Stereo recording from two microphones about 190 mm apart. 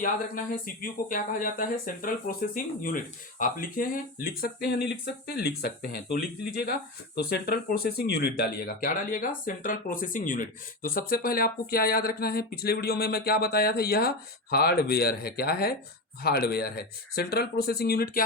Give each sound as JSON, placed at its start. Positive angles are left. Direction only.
{"t": 0.0, "sound": "speech", "side_deg": 45}